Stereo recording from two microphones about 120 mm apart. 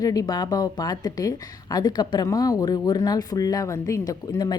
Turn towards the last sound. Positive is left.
turn(degrees=35)  # may be behind; listen again after turning